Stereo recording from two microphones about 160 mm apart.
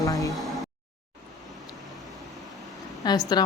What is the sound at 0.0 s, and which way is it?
Music, 20° left (ahead or behind).